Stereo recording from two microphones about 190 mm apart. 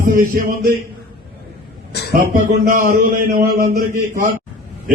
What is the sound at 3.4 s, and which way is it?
Speech, 45° right (ahead or behind).